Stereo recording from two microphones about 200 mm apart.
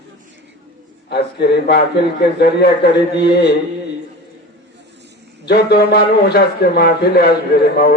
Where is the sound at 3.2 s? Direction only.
55° left (ahead or behind).